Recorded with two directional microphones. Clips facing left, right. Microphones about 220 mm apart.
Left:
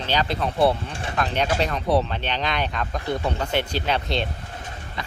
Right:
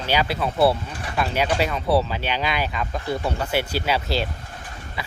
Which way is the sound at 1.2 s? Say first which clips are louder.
Right 1 dB; 5° right (ahead or behind).